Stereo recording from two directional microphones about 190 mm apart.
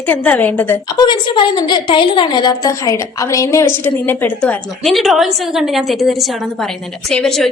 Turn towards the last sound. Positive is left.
turn(degrees=0)  # may be behind; listen again after turning